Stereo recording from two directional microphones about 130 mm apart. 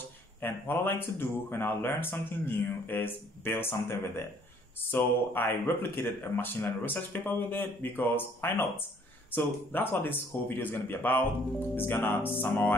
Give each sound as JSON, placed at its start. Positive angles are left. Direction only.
{"t": 0.4, "sound": "speech", "side_deg": 15}
{"t": 4.9, "sound": "speech", "side_deg": 15}